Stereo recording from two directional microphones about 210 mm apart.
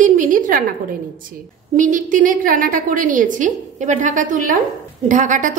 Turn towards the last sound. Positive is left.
turn(degrees=-35)  # may be behind; listen again after turning